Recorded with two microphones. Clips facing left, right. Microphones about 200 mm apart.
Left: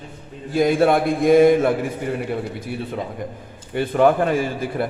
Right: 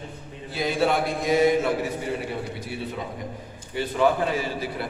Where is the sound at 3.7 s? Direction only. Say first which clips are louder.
Left 5 dB; 55° left (ahead or behind).